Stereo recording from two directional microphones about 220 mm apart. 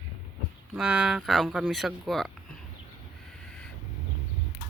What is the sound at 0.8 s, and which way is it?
Speech, 5° right (ahead or behind).